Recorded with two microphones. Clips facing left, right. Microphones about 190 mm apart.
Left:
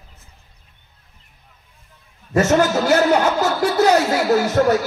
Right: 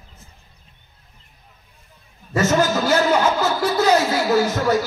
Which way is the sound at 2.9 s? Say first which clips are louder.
Left 2 dB; 40° left (ahead or behind).